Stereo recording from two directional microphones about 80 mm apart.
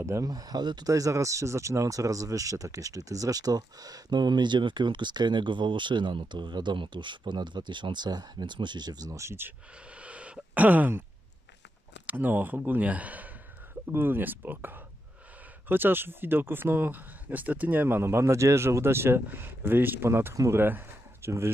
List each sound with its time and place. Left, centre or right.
0.0 s speech: right
0.3 s speech: right
0.8 s speech: right
9.2 s speech: right
9.8 s a sound: centre
12.1 s speech: right
20.5 s a sound: right